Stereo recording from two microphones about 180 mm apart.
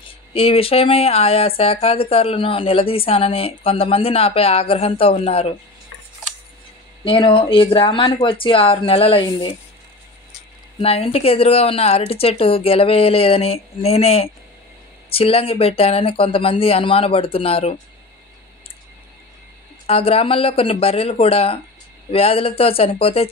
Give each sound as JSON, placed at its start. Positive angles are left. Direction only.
{"t": 0.3, "sound": "a woman's voice", "side_deg": 30}
{"t": 7.1, "sound": "speech", "side_deg": 30}
{"t": 10.8, "sound": "a woman's voice", "side_deg": 35}
{"t": 19.9, "sound": "a woman's voice", "side_deg": 30}